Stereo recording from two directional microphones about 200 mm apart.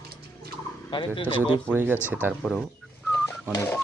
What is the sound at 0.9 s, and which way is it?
Speech, 25° left (ahead or behind).